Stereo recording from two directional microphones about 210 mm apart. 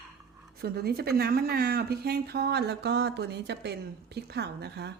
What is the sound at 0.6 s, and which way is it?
Speech, 50° right (ahead or behind).